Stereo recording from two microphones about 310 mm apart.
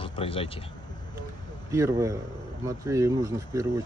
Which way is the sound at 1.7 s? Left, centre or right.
Centre.